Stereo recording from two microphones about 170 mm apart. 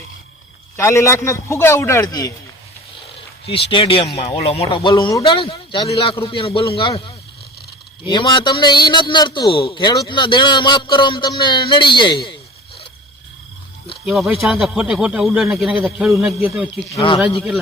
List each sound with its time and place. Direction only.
0.8 s a man's voice: 15° left (ahead or behind)
3.7 s a man's voice: 30° left (ahead or behind)
8.0 s a man's voice: 25° left (ahead or behind)
14.0 s speech: 5° right (ahead or behind)
16.9 s speech: 30° left (ahead or behind)